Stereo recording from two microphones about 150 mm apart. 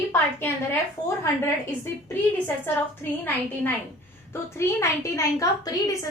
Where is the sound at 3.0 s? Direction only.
15° left (ahead or behind).